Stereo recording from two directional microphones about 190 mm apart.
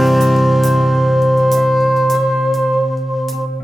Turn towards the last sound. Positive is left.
turn(degrees=0)  # may be behind; listen again after turning